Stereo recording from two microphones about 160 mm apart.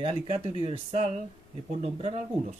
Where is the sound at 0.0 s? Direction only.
35° right (ahead or behind).